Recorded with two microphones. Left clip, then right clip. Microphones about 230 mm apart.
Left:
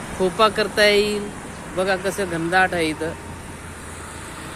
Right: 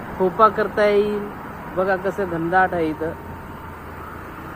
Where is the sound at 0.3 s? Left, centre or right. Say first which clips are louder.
Right 1 dB; left.